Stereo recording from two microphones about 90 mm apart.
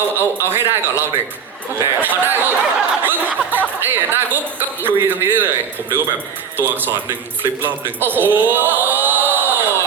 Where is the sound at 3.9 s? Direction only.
25° right (ahead or behind).